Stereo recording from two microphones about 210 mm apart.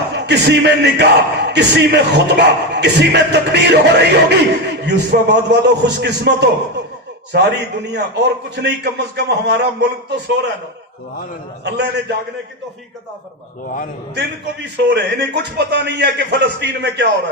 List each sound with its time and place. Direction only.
0.1 s a man's voice: 55° right (ahead or behind)
11.6 s speech: 55° right (ahead or behind)
14.8 s a man's voice: 55° right (ahead or behind)